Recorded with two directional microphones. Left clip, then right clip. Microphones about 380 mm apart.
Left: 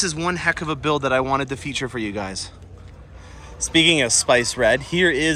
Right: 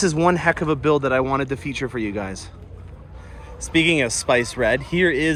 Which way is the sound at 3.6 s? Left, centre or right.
Centre.